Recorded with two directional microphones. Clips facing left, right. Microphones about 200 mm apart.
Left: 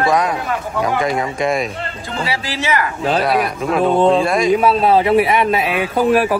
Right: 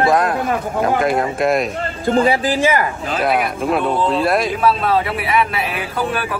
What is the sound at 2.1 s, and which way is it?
Speech, 50° right (ahead or behind).